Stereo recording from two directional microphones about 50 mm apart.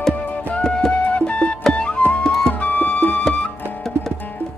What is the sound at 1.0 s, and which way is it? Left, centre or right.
Music, left.